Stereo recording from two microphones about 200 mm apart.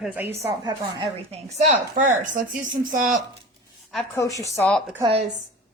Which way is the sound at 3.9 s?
15° left (ahead or behind).